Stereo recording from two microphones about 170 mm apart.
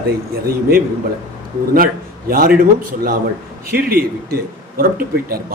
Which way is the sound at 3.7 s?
60° right (ahead or behind).